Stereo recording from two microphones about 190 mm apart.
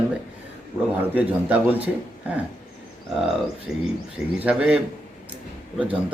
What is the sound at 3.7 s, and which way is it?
A man's voice, centre (ahead or behind).